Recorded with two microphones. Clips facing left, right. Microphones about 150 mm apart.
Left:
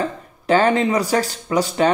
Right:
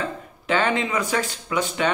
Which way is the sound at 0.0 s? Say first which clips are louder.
Left 5 dB; 35° left (ahead or behind).